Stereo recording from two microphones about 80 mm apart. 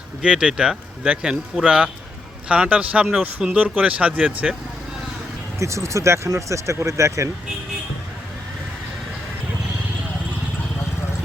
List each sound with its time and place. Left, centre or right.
0.2 s speech: centre
5.5 s speech: right